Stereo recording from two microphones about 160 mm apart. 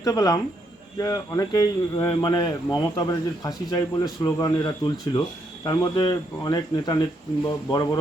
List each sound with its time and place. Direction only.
0.0 s speech: 20° left (ahead or behind)